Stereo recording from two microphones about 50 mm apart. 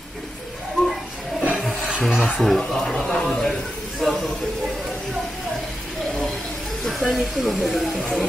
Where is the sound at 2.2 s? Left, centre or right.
Centre.